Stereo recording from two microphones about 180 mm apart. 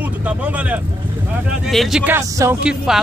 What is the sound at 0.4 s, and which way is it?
Speech, 10° right (ahead or behind).